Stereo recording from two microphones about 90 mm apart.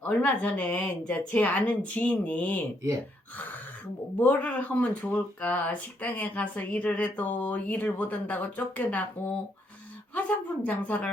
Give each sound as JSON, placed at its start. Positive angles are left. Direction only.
{"t": 0.0, "sound": "speech", "side_deg": 20}
{"t": 4.2, "sound": "speech", "side_deg": 15}